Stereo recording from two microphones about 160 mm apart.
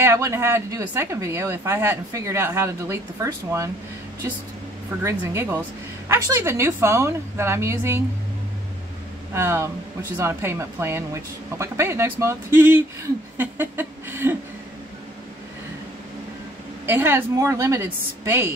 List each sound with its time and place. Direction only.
0.0 s speech: 15° right (ahead or behind)
5.0 s speech: 15° right (ahead or behind)
9.3 s speech: 15° right (ahead or behind)
16.8 s speech: 15° right (ahead or behind)